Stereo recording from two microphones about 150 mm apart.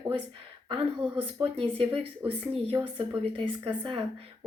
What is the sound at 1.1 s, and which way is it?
A woman's voice, 40° right (ahead or behind).